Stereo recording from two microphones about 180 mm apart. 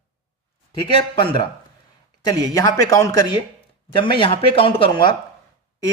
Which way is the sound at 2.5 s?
20° left (ahead or behind).